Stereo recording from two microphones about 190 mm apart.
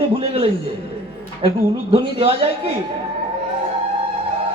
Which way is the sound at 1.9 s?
30° right (ahead or behind).